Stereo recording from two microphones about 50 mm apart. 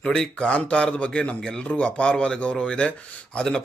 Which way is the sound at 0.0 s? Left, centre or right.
Centre.